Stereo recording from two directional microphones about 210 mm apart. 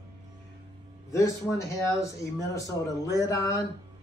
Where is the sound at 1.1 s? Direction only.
15° left (ahead or behind).